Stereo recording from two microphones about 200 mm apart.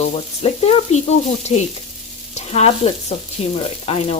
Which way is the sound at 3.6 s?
30° left (ahead or behind).